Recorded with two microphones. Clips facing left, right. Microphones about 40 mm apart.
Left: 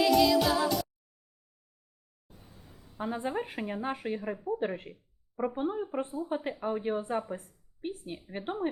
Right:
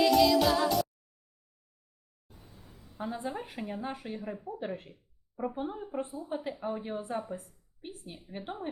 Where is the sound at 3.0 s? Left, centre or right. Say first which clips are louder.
Left 3 dB; left.